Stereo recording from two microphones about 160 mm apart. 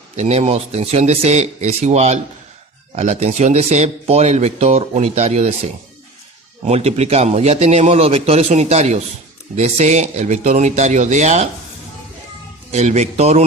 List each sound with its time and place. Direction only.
0.2 s speech: 40° right (ahead or behind)
6.7 s speech: 40° right (ahead or behind)
12.7 s speech: 45° right (ahead or behind)